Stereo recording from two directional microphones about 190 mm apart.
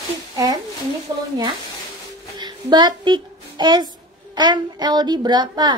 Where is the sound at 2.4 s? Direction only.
20° right (ahead or behind).